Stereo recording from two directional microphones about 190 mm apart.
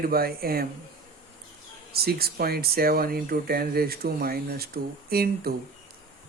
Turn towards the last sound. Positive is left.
turn(degrees=-55)  # may be behind; listen again after turning